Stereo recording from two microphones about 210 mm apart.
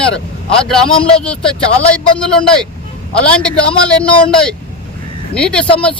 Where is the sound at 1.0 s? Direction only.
25° left (ahead or behind).